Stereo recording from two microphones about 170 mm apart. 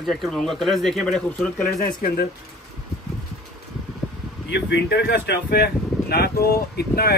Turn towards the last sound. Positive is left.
turn(degrees=65)  # may be behind; listen again after turning